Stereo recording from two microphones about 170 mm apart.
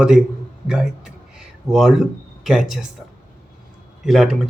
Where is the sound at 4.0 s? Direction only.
Centre (ahead or behind).